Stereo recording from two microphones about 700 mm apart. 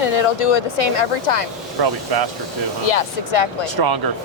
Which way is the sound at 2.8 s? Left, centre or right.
Left.